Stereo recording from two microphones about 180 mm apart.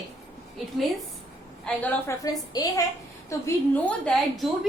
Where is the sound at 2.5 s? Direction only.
20° left (ahead or behind).